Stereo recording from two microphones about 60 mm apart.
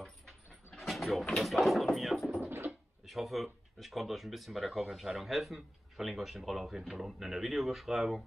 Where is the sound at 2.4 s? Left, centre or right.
Right.